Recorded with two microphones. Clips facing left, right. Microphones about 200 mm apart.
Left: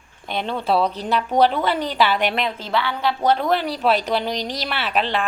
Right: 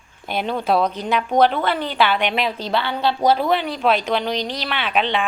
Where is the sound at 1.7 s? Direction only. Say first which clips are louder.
Even; 40° left (ahead or behind).